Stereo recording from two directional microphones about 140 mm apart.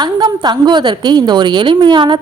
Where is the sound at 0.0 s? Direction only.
30° right (ahead or behind).